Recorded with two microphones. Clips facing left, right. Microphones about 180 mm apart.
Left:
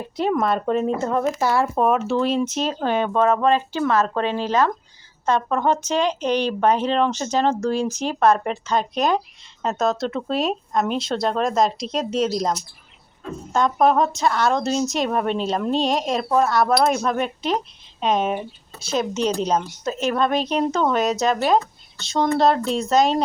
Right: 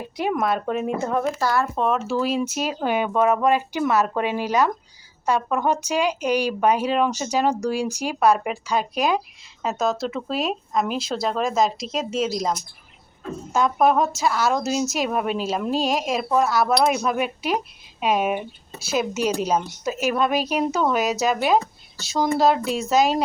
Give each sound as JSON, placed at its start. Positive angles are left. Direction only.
{"t": 0.3, "sound": "a woman's voice", "side_deg": -5}
{"t": 1.4, "sound": "speech", "side_deg": 20}
{"t": 1.8, "sound": "a woman's voice", "side_deg": 5}